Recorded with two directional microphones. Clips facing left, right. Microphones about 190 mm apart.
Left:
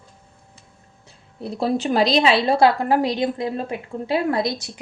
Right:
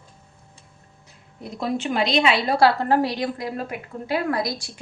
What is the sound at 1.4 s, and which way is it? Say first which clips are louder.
A woman's voice: left 4 dB; 30° left (ahead or behind).